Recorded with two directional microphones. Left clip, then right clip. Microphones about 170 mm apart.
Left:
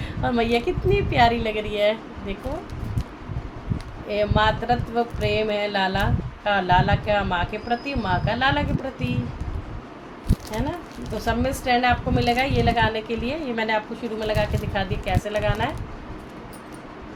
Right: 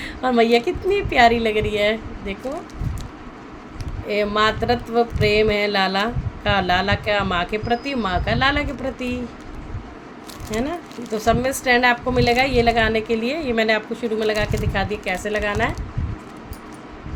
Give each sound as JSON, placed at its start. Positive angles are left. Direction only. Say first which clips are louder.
{"t": 0.0, "sound": "music", "louder": "right 6 dB", "side_deg": -45}
{"t": 4.1, "sound": "music", "louder": "right 2 dB", "side_deg": -45}
{"t": 11.2, "sound": "music", "louder": "right 5 dB", "side_deg": -45}